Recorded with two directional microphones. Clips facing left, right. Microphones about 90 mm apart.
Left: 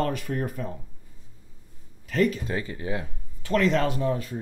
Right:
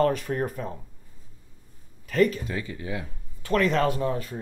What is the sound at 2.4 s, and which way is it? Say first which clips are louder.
Speech: left 2 dB; 35° left (ahead or behind).